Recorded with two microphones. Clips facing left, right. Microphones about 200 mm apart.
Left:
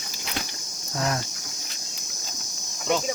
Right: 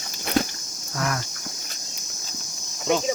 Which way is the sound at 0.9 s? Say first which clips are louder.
Even; 25° left (ahead or behind).